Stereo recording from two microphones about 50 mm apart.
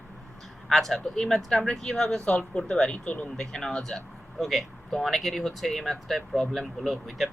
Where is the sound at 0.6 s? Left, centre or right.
Centre.